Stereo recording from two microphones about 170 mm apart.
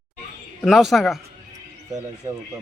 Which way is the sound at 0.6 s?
Centre (ahead or behind).